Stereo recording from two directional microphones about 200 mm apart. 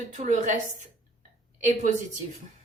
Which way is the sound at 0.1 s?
35° right (ahead or behind).